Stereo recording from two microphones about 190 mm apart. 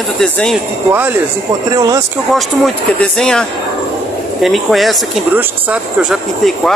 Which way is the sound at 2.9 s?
5° left (ahead or behind).